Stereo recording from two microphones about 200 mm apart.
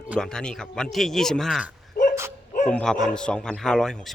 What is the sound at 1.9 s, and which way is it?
Dog, 50° left (ahead or behind).